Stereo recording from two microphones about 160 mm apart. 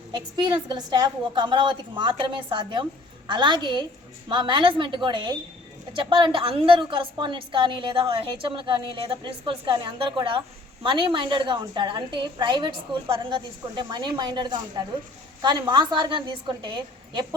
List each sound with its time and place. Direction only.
0.1 s a woman's voice: 30° right (ahead or behind)